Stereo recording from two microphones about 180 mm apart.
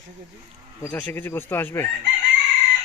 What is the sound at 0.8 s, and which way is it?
Speech, 10° left (ahead or behind).